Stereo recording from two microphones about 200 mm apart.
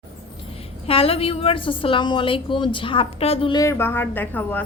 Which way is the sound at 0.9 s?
30° left (ahead or behind).